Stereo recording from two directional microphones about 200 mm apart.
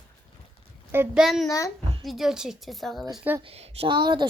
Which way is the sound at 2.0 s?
Centre (ahead or behind).